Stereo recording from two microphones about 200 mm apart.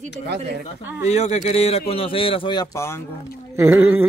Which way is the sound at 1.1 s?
35° left (ahead or behind).